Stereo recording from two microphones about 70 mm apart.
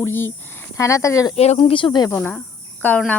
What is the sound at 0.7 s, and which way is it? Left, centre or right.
Speech, left.